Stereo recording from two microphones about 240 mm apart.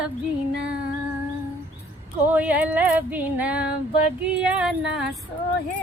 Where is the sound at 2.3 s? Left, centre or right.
Centre.